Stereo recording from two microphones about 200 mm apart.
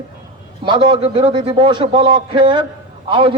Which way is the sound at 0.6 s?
25° right (ahead or behind).